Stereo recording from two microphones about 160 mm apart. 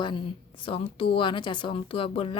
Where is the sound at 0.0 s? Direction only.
30° left (ahead or behind).